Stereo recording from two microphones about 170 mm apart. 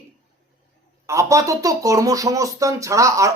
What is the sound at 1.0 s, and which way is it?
Speech, 20° right (ahead or behind).